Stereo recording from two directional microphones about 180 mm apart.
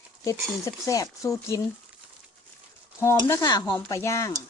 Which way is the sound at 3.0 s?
15° left (ahead or behind).